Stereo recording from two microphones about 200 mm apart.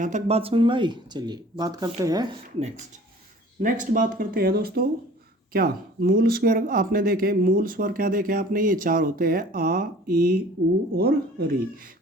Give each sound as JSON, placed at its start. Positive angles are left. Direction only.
{"t": 0.0, "sound": "speech", "side_deg": -35}
{"t": 3.6, "sound": "speech", "side_deg": -40}